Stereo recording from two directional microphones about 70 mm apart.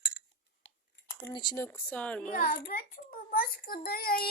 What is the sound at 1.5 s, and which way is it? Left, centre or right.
Speech, left.